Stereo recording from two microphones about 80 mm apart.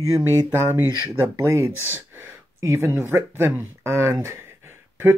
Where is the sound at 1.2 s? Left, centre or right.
Right.